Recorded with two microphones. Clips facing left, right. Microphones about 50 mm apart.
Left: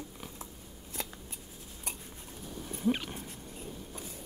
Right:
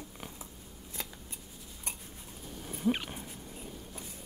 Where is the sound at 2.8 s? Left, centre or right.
Centre.